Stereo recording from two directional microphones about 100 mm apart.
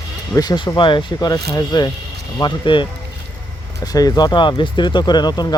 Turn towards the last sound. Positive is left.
turn(degrees=45)  # may be behind; listen again after turning